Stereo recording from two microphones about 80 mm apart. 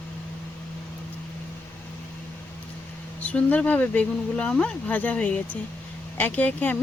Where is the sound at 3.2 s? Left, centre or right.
Centre.